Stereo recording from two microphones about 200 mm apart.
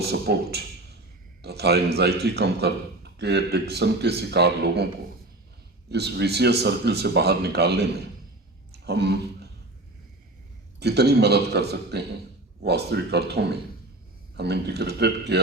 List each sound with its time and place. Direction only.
0.0 s a man's voice: 55° right (ahead or behind)
5.9 s a man's voice: 55° right (ahead or behind)
10.8 s a man's voice: 55° right (ahead or behind)